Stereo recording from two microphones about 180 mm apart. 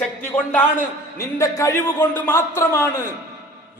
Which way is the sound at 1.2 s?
15° left (ahead or behind).